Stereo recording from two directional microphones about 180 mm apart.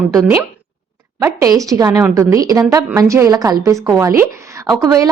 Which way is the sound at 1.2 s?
20° right (ahead or behind).